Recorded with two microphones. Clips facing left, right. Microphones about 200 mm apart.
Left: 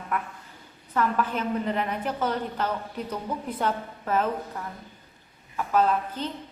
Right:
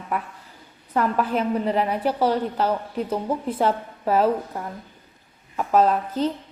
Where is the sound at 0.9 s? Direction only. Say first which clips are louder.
Right 4 dB; 35° right (ahead or behind).